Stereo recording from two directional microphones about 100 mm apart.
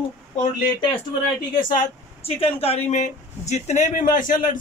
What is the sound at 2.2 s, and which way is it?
Speech, 75° left (ahead or behind).